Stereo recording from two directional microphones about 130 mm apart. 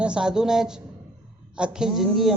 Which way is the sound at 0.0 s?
5° right (ahead or behind).